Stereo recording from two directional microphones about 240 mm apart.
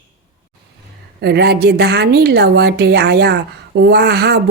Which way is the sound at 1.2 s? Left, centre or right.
Right.